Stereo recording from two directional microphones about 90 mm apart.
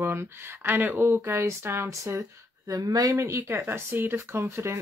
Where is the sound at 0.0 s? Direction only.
25° right (ahead or behind).